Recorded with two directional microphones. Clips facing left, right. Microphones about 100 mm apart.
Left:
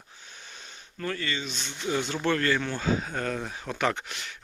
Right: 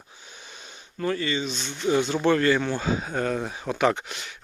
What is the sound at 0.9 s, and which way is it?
Speech, 15° right (ahead or behind).